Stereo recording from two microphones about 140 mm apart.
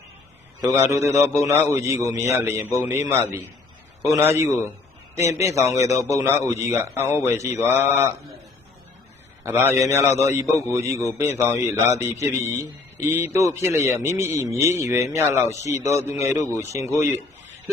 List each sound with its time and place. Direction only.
0.6 s a man's voice: 25° right (ahead or behind)
9.4 s a man's voice: 15° right (ahead or behind)